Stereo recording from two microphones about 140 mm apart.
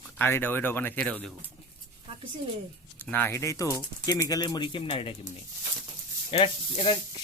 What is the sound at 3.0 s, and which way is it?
Speech, 15° left (ahead or behind).